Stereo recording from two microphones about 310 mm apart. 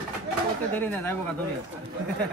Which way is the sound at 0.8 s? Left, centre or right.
Centre.